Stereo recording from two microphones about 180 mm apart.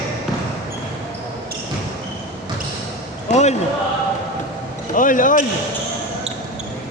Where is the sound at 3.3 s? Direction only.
40° left (ahead or behind).